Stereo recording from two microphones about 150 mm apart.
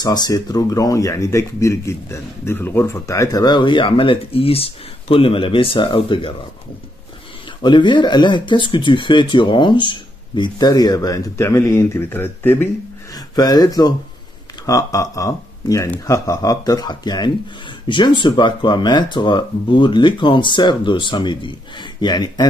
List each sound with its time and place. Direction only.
0.0 s speech: 25° left (ahead or behind)
7.6 s speech: 30° left (ahead or behind); by 12.6 s 15° left (ahead or behind)
13.1 s speech: 25° left (ahead or behind)